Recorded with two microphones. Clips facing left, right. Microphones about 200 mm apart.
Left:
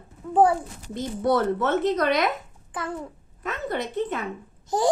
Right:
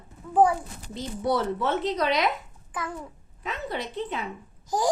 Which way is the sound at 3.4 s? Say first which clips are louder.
Left 3 dB; 50° left (ahead or behind).